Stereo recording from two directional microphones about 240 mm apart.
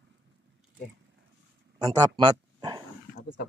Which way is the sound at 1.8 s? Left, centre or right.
Centre.